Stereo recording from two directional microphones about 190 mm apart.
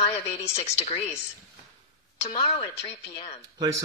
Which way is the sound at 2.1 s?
30° left (ahead or behind).